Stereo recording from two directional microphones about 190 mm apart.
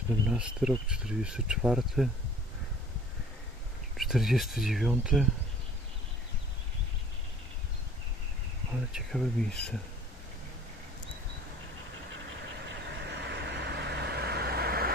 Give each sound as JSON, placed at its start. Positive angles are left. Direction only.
{"t": 0.3, "sound": "speech", "side_deg": -5}
{"t": 3.9, "sound": "speech", "side_deg": 0}
{"t": 8.9, "sound": "speech", "side_deg": 0}
{"t": 12.6, "sound": "vehicle", "side_deg": -65}